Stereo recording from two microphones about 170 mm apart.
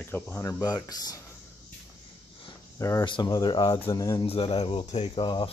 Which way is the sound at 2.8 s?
20° left (ahead or behind).